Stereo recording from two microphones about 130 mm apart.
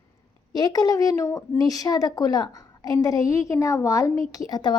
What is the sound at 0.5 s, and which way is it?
A woman's voice, 30° left (ahead or behind).